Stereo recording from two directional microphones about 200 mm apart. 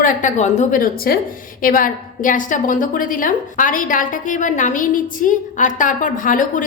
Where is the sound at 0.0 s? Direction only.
40° left (ahead or behind).